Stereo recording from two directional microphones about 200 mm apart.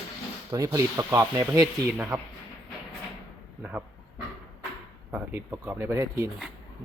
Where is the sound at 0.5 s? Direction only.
15° right (ahead or behind).